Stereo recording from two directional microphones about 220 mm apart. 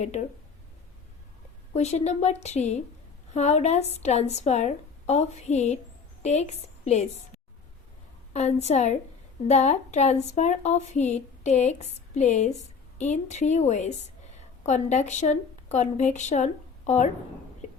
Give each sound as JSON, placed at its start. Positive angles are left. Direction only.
{"t": 1.7, "sound": "a woman's voice", "side_deg": 30}
{"t": 8.3, "sound": "a woman's voice", "side_deg": 30}